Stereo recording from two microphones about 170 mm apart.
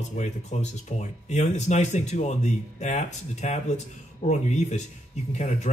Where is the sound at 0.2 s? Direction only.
45° left (ahead or behind).